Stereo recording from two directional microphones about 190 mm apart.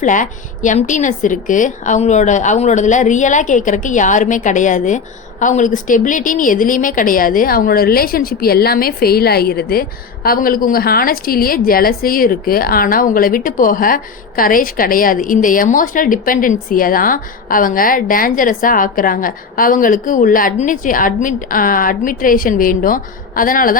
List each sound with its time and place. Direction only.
0.0 s a woman's voice: 40° left (ahead or behind)